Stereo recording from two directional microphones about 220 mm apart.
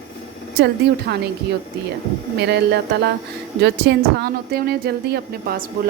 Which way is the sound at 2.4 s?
50° right (ahead or behind).